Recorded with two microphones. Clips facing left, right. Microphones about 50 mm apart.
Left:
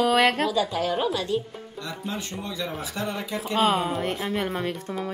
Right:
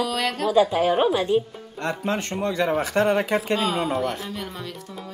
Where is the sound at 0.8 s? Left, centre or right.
Right.